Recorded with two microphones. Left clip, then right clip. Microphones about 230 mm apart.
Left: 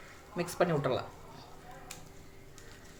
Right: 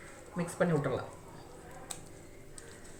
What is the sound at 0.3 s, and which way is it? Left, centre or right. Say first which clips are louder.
Speech: left 1 dB; left.